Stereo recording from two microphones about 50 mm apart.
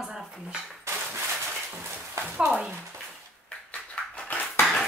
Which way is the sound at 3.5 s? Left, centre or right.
Centre.